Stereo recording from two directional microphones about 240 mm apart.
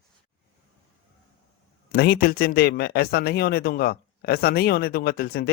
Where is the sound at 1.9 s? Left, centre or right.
Left.